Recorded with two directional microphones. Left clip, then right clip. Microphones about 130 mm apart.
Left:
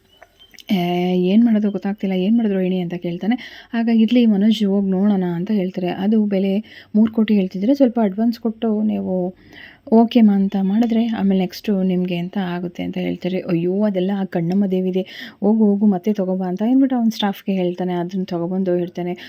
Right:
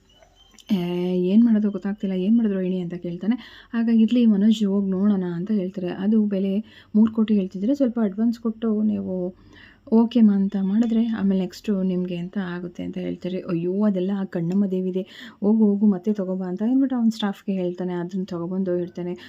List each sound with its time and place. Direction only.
0.7 s speech: 20° left (ahead or behind)
9.0 s speech: 15° left (ahead or behind)
9.9 s speech: 25° left (ahead or behind)